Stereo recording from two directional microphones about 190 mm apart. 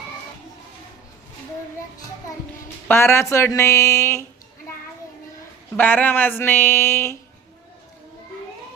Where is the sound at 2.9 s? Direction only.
15° left (ahead or behind).